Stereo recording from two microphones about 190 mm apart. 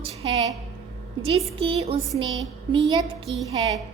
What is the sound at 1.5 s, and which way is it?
Speech, 30° right (ahead or behind).